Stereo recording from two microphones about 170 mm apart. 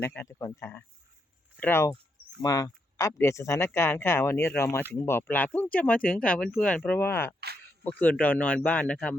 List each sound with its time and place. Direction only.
0.0 s speech: 15° left (ahead or behind)